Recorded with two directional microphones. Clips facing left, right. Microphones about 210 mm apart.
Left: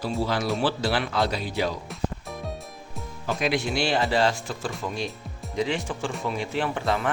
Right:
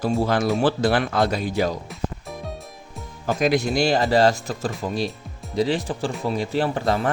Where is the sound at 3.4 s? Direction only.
40° right (ahead or behind).